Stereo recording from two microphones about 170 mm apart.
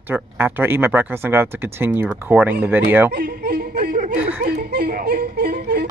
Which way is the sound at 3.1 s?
65° right (ahead or behind).